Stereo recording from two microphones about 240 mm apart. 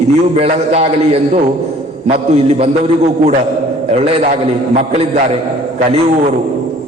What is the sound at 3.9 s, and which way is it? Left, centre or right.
A man's voice, right.